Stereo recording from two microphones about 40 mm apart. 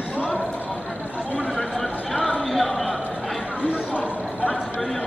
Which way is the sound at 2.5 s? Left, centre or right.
Centre.